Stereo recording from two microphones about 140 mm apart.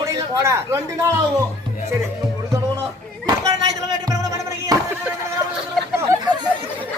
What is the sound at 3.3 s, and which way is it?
Music, 25° right (ahead or behind).